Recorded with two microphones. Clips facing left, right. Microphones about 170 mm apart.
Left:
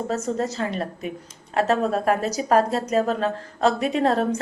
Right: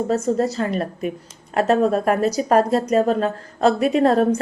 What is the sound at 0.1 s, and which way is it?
A woman's voice, 35° right (ahead or behind).